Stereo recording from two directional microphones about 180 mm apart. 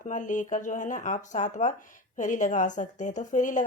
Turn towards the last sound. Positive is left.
turn(degrees=45)  # may be behind; listen again after turning